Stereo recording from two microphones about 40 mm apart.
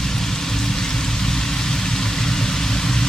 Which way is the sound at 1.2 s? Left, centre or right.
Centre.